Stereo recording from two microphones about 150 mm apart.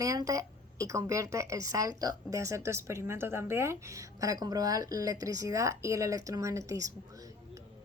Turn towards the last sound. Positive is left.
turn(degrees=-25)  # may be behind; listen again after turning